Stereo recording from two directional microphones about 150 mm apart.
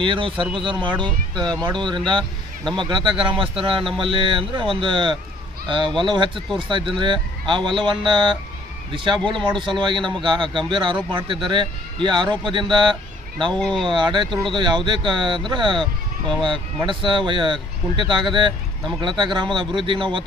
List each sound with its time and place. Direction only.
0.0 s speech: 35° right (ahead or behind)
13.6 s speech: 5° left (ahead or behind)
13.8 s speech: 30° right (ahead or behind)